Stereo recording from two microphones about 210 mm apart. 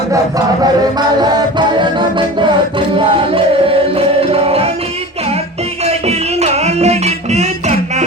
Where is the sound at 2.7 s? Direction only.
25° right (ahead or behind).